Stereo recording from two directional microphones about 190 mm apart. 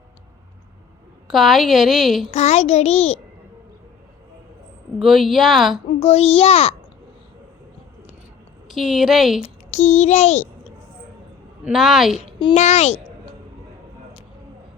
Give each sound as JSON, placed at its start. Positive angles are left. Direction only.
{"t": 1.3, "sound": "a woman's voice", "side_deg": 0}
{"t": 2.3, "sound": "a child's voice", "side_deg": 35}
{"t": 4.9, "sound": "a woman's voice", "side_deg": 0}
{"t": 6.0, "sound": "a child's voice", "side_deg": 30}
{"t": 8.7, "sound": "a woman's voice", "side_deg": 0}
{"t": 9.4, "sound": "speech", "side_deg": 35}
{"t": 11.6, "sound": "a woman's voice", "side_deg": 0}
{"t": 12.5, "sound": "a child's voice", "side_deg": 35}